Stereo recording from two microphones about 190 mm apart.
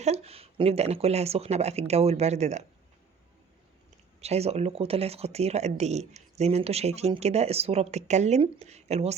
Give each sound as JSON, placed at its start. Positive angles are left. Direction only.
{"t": 0.0, "sound": "speech", "side_deg": -35}
{"t": 4.2, "sound": "speech", "side_deg": -35}